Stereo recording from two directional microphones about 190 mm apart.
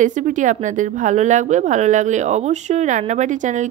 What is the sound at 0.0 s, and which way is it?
Speech, 40° right (ahead or behind).